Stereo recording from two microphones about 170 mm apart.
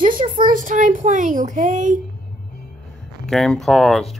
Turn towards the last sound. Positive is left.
turn(degrees=0)  # may be behind; listen again after turning